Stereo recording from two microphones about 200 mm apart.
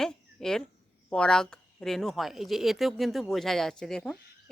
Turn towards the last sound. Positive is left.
turn(degrees=5)  # may be behind; listen again after turning